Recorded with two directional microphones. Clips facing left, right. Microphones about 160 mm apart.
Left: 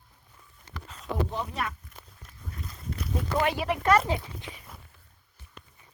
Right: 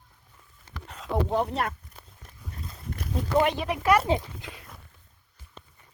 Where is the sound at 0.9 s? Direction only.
65° right (ahead or behind).